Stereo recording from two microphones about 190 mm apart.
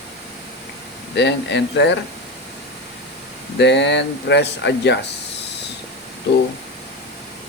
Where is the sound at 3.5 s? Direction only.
65° left (ahead or behind).